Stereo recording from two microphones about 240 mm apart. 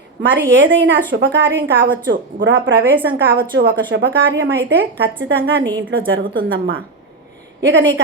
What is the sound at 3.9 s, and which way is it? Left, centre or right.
Speech, right.